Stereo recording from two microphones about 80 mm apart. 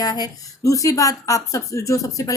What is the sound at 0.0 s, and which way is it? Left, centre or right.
A woman's voice, left.